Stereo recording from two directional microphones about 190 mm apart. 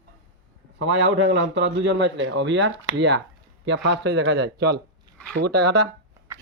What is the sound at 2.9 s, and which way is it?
A man's voice, 65° right (ahead or behind).